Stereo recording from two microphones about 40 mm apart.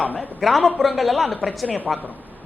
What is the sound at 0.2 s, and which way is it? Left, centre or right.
Speech, centre.